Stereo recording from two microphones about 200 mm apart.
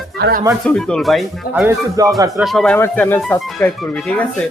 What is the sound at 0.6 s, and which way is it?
Speech, 5° left (ahead or behind).